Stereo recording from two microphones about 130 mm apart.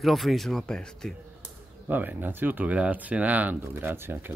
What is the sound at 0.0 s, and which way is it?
Speech, centre (ahead or behind).